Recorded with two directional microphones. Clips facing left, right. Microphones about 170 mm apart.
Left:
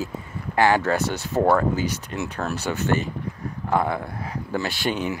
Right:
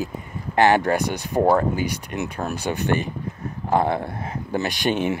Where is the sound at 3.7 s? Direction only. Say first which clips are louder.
Right 3 dB; 25° right (ahead or behind).